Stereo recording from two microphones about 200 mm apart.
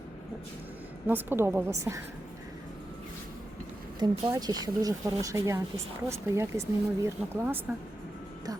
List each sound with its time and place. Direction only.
1.0 s speech: 10° right (ahead or behind)
4.0 s speech: 20° right (ahead or behind)